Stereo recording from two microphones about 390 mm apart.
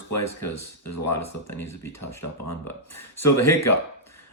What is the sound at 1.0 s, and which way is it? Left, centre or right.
Speech, centre.